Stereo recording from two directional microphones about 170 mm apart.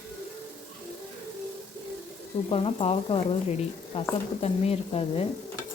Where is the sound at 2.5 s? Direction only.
35° left (ahead or behind).